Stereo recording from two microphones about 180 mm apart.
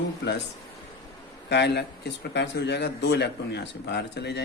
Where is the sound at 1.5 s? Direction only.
70° left (ahead or behind).